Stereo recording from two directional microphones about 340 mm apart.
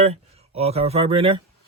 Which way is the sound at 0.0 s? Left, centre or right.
Centre.